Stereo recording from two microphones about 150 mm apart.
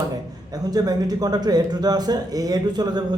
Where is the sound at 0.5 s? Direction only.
25° right (ahead or behind).